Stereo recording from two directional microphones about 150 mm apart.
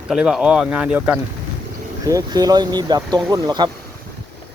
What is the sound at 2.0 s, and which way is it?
Speech, 25° right (ahead or behind).